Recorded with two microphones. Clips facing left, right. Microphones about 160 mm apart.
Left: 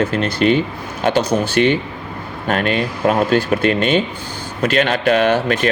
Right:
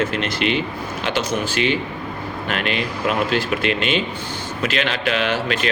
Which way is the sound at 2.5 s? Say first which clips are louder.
Left 6 dB; 45° left (ahead or behind).